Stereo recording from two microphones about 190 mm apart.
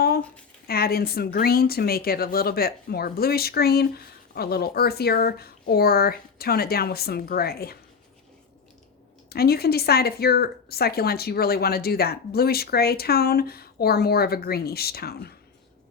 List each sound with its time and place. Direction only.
0.7 s speech: 55° left (ahead or behind)
9.3 s speech: 55° left (ahead or behind)